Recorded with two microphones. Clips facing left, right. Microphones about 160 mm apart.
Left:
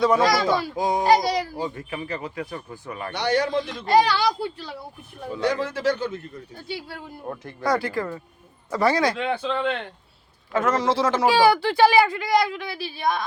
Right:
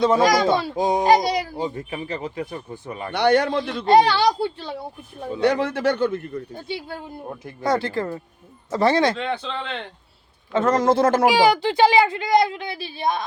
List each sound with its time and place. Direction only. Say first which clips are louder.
0.0 s a child's voice: right 2 dB; 25° right (ahead or behind)
3.1 s a man's voice: right 5 dB; 60° right (ahead or behind)
3.8 s a child's voice: right 4 dB; 25° right (ahead or behind)
5.4 s a man's voice: right 4 dB; 65° right (ahead or behind)
6.7 s a child's voice: right 3 dB; 25° right (ahead or behind)
9.1 s speech: left 2 dB; 5° left (ahead or behind)
10.5 s a child's voice: right 3 dB; 30° right (ahead or behind)
10.8 s speech: right 4 dB; 50° right (ahead or behind)
11.3 s a child's voice: right 1 dB; 15° right (ahead or behind)